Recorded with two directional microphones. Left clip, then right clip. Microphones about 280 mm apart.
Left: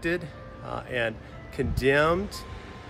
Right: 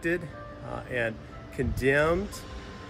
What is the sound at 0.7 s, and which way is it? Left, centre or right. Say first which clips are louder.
A man's voice: left 2 dB; centre.